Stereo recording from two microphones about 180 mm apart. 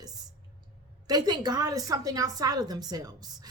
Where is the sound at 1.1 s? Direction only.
20° right (ahead or behind).